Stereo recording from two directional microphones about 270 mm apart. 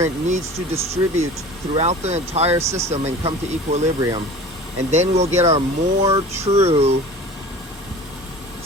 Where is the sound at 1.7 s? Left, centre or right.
Right.